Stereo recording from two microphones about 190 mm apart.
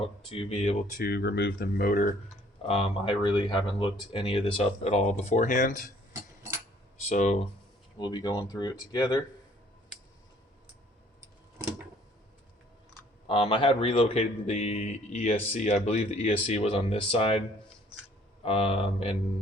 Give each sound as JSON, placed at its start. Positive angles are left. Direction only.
{"t": 0.0, "sound": "speech", "side_deg": 30}
{"t": 0.9, "sound": "speech", "side_deg": 55}
{"t": 2.6, "sound": "speech", "side_deg": 30}
{"t": 7.1, "sound": "speech", "side_deg": 40}
{"t": 7.9, "sound": "speech", "side_deg": 25}
{"t": 13.2, "sound": "speech", "side_deg": 30}
{"t": 18.4, "sound": "speech", "side_deg": 30}